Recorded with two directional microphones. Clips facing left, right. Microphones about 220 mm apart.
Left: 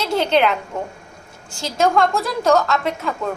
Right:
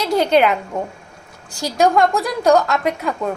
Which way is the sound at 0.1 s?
15° right (ahead or behind).